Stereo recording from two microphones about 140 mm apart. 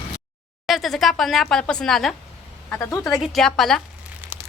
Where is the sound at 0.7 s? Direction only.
Centre (ahead or behind).